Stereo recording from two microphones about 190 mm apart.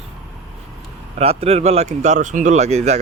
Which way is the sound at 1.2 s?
30° right (ahead or behind).